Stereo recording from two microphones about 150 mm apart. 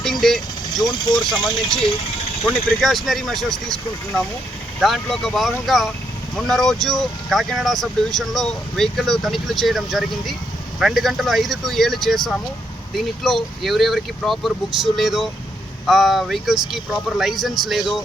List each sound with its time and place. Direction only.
0.0 s vehicle: centre (ahead or behind)
0.9 s speech: 30° left (ahead or behind)
2.4 s speech: centre (ahead or behind)